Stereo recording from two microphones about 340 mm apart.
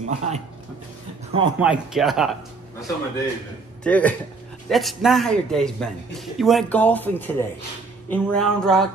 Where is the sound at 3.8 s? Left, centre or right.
Centre.